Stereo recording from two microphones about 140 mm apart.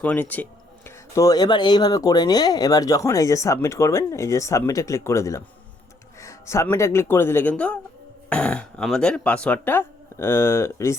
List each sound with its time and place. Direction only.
0.0 s speech: 10° left (ahead or behind)
0.9 s speech: 25° left (ahead or behind)